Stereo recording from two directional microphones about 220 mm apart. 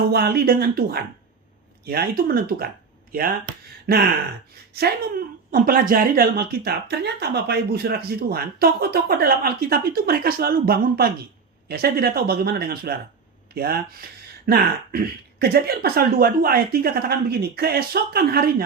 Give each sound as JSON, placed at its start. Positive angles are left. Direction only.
{"t": 0.1, "sound": "speech", "side_deg": -45}
{"t": 5.5, "sound": "speech", "side_deg": -40}